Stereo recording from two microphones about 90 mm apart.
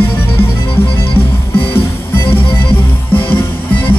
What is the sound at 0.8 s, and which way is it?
Music, 90° left.